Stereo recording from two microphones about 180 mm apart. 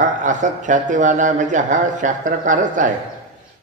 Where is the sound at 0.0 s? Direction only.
45° right (ahead or behind).